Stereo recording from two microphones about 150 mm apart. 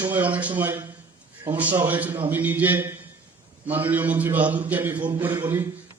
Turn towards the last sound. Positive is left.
turn(degrees=-15)  # may be behind; listen again after turning